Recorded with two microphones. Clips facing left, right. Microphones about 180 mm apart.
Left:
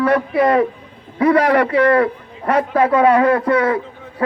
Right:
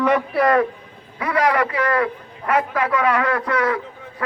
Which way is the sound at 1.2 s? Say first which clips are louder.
Left 6 dB; 35° left (ahead or behind).